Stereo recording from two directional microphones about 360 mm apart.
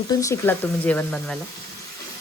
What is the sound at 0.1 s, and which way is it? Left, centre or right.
Speech, centre.